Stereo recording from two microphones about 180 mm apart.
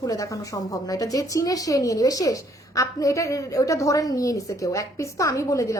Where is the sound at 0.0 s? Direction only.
20° left (ahead or behind).